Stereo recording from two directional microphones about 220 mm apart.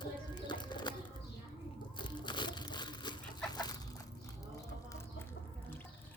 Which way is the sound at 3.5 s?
15° left (ahead or behind).